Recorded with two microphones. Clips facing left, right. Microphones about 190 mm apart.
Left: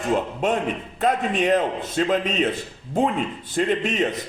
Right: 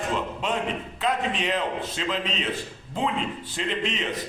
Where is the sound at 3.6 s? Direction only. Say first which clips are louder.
Left 8 dB; 50° left (ahead or behind).